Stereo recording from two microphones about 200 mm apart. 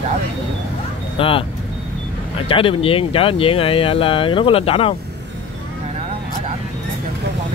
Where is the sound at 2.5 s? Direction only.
25° left (ahead or behind).